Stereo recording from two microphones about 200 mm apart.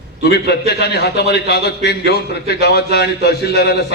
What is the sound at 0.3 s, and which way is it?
A man's voice, 55° left (ahead or behind).